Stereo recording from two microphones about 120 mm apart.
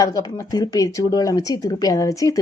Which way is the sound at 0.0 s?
30° left (ahead or behind).